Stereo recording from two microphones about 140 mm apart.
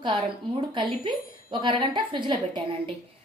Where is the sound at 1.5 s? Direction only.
35° right (ahead or behind).